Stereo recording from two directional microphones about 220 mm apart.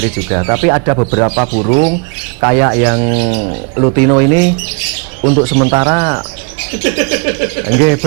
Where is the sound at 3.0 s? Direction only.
25° right (ahead or behind).